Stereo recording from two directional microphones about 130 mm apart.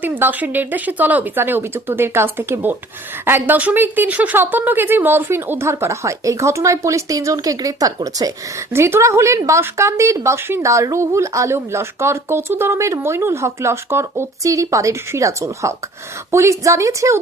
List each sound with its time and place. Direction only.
0.0 s speech: 15° right (ahead or behind)